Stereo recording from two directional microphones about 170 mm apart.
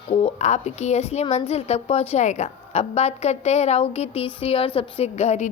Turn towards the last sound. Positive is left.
turn(degrees=40)  # may be behind; listen again after turning